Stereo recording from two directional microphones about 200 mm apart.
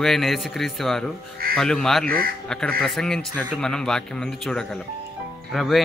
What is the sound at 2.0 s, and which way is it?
Speech, 45° right (ahead or behind).